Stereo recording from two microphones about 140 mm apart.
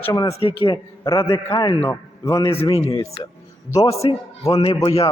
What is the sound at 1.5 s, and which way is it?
Speech, 35° left (ahead or behind).